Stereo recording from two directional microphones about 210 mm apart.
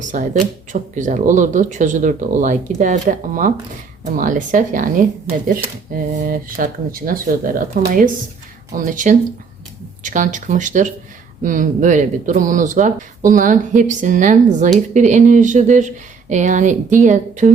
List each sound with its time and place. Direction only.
0.1 s speech: 35° right (ahead or behind)